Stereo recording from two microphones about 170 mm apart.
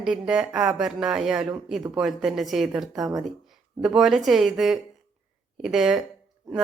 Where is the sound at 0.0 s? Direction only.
5° right (ahead or behind).